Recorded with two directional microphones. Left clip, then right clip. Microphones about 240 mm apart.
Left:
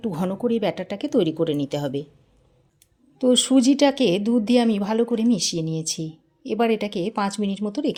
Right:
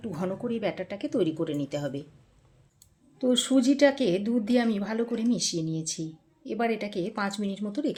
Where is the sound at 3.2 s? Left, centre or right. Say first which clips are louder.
Left 6 dB; left.